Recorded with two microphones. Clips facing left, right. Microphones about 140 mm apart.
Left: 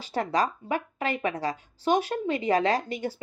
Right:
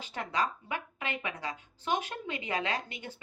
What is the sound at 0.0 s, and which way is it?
A woman's voice, 35° left (ahead or behind).